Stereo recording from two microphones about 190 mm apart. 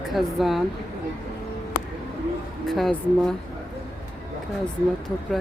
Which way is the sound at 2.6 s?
Centre (ahead or behind).